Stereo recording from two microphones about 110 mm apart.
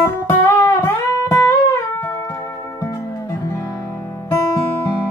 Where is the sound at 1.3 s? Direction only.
25° left (ahead or behind).